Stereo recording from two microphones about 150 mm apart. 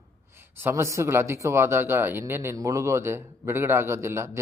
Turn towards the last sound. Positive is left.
turn(degrees=-20)  # may be behind; listen again after turning